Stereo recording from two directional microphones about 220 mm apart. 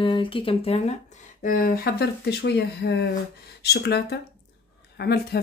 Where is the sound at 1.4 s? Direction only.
40° left (ahead or behind).